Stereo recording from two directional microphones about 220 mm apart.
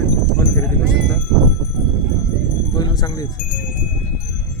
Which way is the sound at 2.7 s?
15° left (ahead or behind).